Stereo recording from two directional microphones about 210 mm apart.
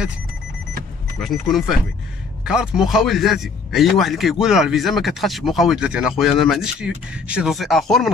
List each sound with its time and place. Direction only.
1.2 s speech: centre (ahead or behind)